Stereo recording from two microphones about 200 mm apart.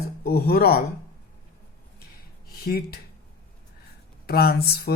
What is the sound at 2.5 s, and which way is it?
Speech, 50° left (ahead or behind).